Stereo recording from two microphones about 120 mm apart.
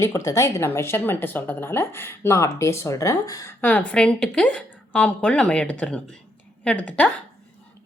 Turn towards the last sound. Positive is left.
turn(degrees=10)  # may be behind; listen again after turning